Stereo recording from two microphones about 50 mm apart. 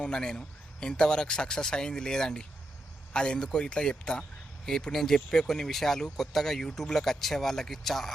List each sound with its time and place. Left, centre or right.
0.0 s speech: centre